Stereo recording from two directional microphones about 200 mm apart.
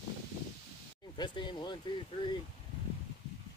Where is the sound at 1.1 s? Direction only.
20° left (ahead or behind).